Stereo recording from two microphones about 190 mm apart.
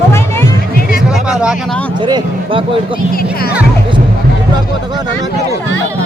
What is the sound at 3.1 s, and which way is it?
Speech, 50° left (ahead or behind).